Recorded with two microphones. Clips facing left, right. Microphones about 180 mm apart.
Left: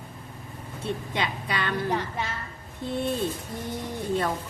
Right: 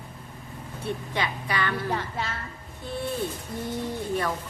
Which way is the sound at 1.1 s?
20° left (ahead or behind).